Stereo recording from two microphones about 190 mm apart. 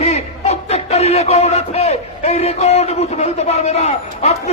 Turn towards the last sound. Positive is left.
turn(degrees=35)  # may be behind; listen again after turning